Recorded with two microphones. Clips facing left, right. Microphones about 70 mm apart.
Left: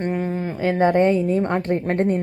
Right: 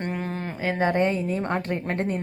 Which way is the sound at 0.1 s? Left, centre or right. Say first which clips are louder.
Left 6 dB; centre.